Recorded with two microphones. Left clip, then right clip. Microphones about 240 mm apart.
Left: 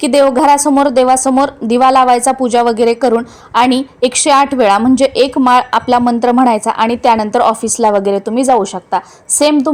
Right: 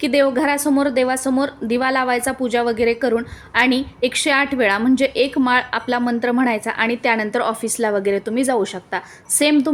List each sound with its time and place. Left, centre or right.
0.0 s a woman's voice: left